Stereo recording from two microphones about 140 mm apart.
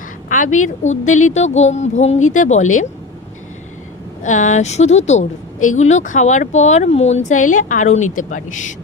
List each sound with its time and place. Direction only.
0.3 s speech: 70° left (ahead or behind)
4.2 s speech: 60° left (ahead or behind)